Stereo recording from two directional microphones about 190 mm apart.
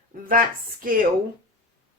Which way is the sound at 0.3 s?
45° right (ahead or behind).